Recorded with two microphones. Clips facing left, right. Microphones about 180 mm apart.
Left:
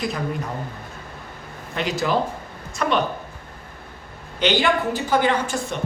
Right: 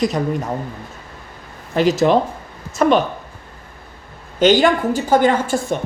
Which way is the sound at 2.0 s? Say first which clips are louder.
Right 7 dB; 35° right (ahead or behind).